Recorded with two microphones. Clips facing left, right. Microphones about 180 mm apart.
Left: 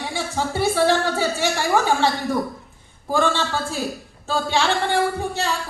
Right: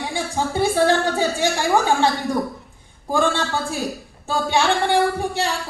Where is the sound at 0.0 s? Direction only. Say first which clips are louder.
Right 1 dB; 15° right (ahead or behind).